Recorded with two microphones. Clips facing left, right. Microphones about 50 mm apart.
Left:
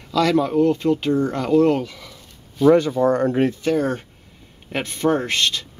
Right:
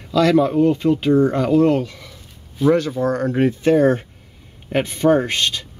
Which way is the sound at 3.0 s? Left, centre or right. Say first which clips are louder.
Left 2 dB; left.